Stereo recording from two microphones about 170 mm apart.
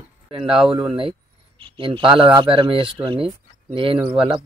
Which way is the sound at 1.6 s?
30° right (ahead or behind).